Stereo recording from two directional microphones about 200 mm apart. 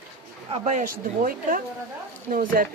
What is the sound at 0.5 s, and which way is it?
Speech, 35° right (ahead or behind).